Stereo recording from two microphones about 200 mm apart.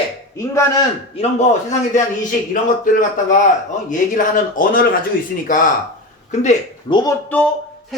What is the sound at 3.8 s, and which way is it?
Speech, 40° left (ahead or behind).